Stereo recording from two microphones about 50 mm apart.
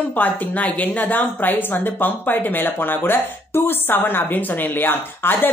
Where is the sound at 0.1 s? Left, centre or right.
Left.